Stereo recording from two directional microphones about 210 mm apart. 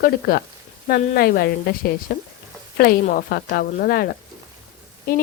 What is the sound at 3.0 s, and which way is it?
Speech, 45° left (ahead or behind).